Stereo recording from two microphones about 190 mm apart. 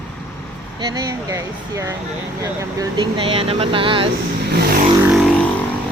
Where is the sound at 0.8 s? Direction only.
20° right (ahead or behind).